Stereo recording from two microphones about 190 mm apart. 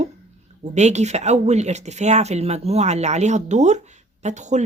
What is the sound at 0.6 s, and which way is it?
Speech, 35° right (ahead or behind).